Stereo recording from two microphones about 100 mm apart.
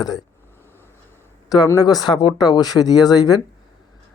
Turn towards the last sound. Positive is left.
turn(degrees=40)  # may be behind; listen again after turning